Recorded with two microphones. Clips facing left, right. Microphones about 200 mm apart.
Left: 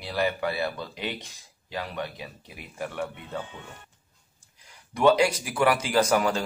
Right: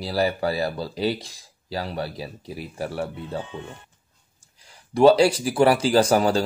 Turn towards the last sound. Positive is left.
turn(degrees=-35)  # may be behind; listen again after turning